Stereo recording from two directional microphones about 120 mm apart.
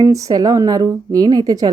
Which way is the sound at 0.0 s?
30° right (ahead or behind).